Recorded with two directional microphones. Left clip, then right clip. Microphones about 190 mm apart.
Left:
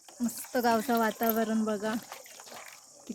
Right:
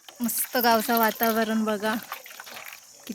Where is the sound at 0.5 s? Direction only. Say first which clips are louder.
Right 5 dB; 5° right (ahead or behind).